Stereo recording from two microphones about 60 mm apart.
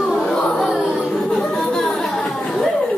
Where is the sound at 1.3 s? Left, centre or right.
Centre.